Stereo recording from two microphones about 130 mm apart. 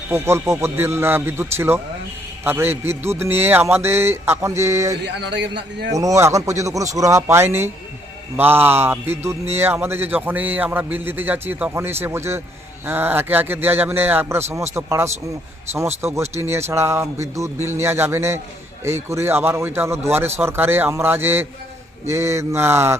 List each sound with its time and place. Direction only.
0.1 s a man's voice: 20° right (ahead or behind)
6.0 s a man's voice: 25° right (ahead or behind)